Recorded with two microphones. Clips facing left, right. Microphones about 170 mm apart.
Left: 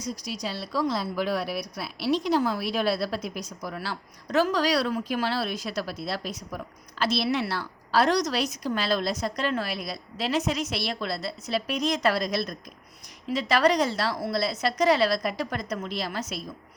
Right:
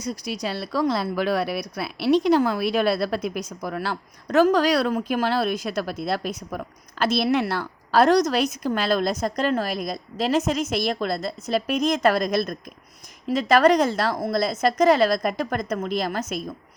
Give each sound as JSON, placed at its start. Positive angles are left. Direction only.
{"t": 0.4, "sound": "a woman's voice", "side_deg": -60}